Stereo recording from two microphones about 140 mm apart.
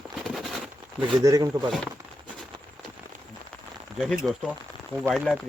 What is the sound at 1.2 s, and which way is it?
Speech, 25° right (ahead or behind).